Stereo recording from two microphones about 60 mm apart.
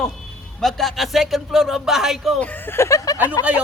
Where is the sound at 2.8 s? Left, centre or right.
Left.